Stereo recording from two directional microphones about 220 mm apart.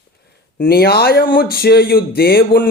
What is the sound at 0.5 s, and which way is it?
Speech, 40° left (ahead or behind).